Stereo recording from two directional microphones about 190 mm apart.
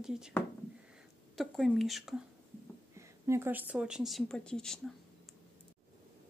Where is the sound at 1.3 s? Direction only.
Centre (ahead or behind).